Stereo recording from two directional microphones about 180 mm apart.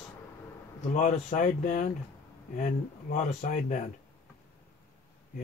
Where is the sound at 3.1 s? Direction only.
40° left (ahead or behind).